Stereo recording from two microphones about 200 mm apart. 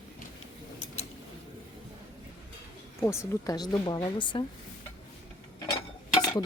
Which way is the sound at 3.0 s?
15° left (ahead or behind).